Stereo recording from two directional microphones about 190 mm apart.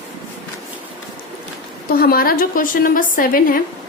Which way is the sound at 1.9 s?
50° left (ahead or behind).